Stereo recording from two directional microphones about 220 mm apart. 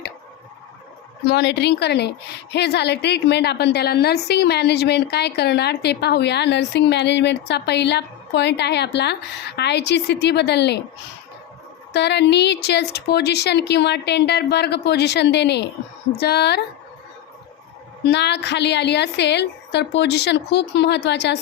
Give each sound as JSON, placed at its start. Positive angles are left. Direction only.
{"t": 1.3, "sound": "a woman's voice", "side_deg": 50}
{"t": 11.9, "sound": "a woman's voice", "side_deg": 50}
{"t": 18.0, "sound": "a woman's voice", "side_deg": 50}